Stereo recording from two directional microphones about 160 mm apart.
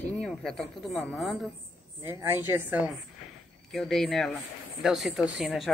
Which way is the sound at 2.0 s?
15° right (ahead or behind).